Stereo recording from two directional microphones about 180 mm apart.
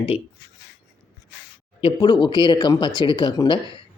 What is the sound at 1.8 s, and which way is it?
A man's voice, 25° left (ahead or behind).